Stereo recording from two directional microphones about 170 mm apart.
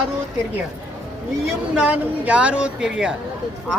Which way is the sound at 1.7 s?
5° right (ahead or behind).